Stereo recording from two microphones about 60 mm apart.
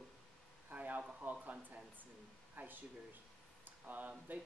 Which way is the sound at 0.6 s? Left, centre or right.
Right.